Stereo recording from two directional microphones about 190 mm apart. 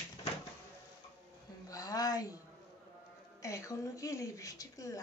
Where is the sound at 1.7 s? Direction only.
20° left (ahead or behind).